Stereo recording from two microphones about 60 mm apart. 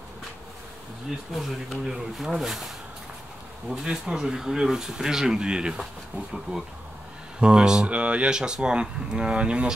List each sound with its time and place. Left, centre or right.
1.3 s speech: centre
3.7 s speech: centre